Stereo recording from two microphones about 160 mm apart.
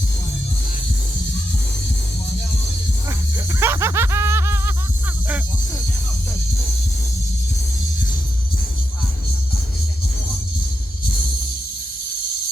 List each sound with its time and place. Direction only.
3.6 s music: 15° right (ahead or behind)